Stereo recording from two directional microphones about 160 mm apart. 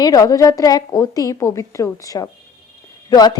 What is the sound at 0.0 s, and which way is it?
A woman's voice, 20° left (ahead or behind).